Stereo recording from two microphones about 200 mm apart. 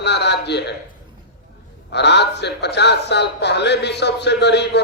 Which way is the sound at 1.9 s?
60° left (ahead or behind).